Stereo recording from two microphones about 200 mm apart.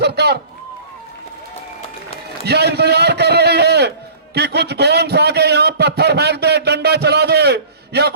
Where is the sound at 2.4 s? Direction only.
55° right (ahead or behind).